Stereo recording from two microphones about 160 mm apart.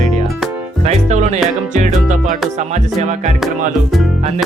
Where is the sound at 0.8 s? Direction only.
45° right (ahead or behind).